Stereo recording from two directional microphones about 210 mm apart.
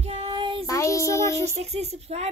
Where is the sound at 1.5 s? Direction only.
30° right (ahead or behind).